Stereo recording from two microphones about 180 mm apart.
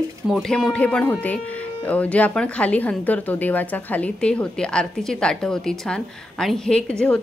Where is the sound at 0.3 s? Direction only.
Centre (ahead or behind).